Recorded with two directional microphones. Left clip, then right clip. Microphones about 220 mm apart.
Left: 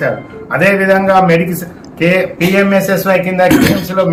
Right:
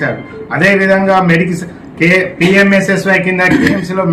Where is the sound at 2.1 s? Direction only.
Centre (ahead or behind).